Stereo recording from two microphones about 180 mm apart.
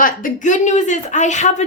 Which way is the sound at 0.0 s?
45° left (ahead or behind).